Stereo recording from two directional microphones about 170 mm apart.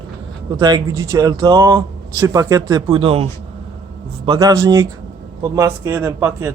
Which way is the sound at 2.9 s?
30° right (ahead or behind).